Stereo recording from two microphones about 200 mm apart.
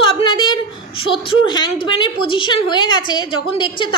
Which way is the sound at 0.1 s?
25° left (ahead or behind).